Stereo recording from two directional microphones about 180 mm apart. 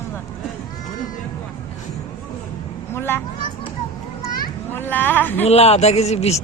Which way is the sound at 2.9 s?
10° left (ahead or behind).